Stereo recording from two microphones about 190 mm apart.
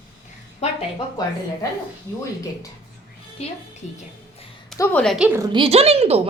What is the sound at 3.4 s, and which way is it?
Speech, 35° left (ahead or behind).